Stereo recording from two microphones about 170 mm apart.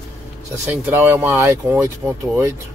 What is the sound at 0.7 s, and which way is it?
Speech, 10° right (ahead or behind).